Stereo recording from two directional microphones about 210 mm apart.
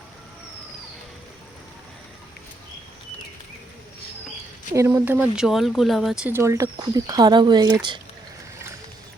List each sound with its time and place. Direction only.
4.7 s speech: 15° right (ahead or behind)
6.3 s speech: 15° right (ahead or behind)